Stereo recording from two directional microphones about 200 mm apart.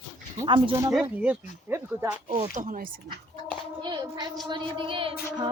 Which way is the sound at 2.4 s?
40° right (ahead or behind).